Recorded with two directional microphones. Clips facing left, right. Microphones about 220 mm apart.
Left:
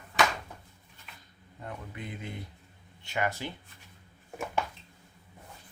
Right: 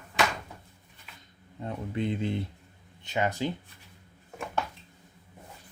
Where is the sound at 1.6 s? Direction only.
30° right (ahead or behind).